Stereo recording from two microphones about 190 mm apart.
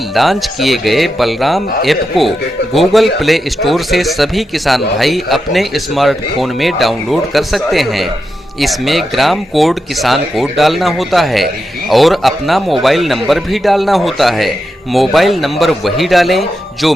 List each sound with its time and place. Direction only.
0.1 s speech: centre (ahead or behind)